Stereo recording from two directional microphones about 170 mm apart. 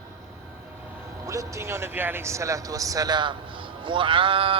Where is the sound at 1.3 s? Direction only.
20° right (ahead or behind).